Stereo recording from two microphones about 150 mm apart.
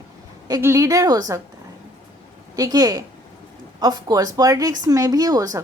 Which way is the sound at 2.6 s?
25° right (ahead or behind).